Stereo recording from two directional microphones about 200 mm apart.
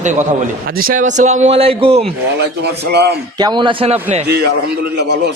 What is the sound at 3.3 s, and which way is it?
Speech, 20° right (ahead or behind).